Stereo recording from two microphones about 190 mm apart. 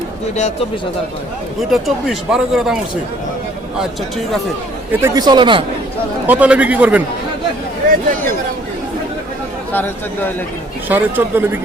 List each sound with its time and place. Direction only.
1.7 s speech: centre (ahead or behind)
4.9 s speech: 15° right (ahead or behind)
6.2 s a man's voice: 10° right (ahead or behind)
9.7 s speech: 10° left (ahead or behind)
10.8 s a man's voice: 10° right (ahead or behind)